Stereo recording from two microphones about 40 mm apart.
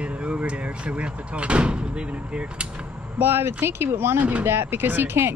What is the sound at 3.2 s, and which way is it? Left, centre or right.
Speech, right.